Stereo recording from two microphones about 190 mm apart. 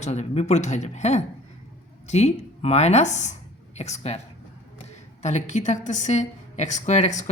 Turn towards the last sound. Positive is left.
turn(degrees=40)  # may be behind; listen again after turning